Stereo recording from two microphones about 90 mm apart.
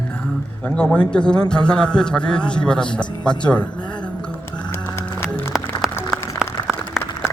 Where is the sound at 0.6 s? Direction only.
10° left (ahead or behind).